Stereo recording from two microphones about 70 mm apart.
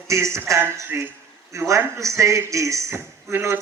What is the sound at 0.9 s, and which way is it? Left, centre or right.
Speech, right.